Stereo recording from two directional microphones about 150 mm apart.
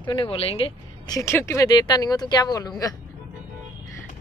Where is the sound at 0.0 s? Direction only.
30° left (ahead or behind).